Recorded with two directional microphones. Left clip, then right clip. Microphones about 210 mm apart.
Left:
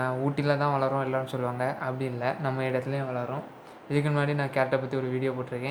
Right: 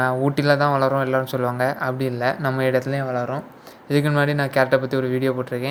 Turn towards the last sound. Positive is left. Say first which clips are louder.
# right 8 dB
turn(degrees=-30)  # may be behind; listen again after turning